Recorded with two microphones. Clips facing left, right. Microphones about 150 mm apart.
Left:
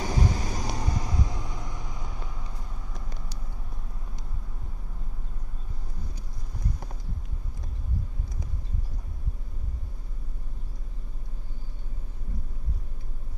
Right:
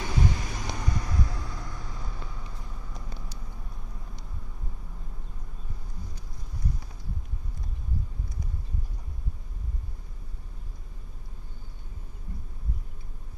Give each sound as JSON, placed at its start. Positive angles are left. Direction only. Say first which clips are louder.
{"t": 0.0, "sound": "vehicle", "louder": "left 1 dB", "side_deg": 40}